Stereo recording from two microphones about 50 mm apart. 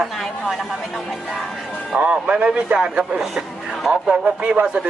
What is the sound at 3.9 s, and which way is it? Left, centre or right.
Speech, right.